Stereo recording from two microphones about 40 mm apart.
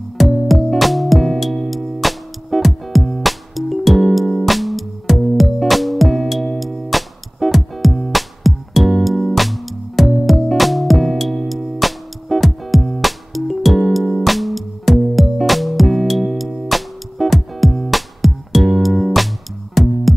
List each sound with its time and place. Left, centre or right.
0.2 s music: centre